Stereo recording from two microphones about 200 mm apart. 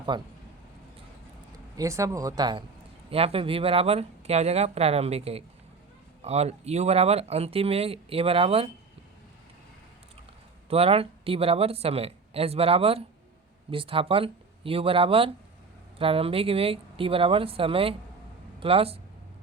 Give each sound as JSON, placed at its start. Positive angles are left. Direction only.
{"t": 0.1, "sound": "speech", "side_deg": -25}
{"t": 1.5, "sound": "speech", "side_deg": -15}
{"t": 10.7, "sound": "speech", "side_deg": -30}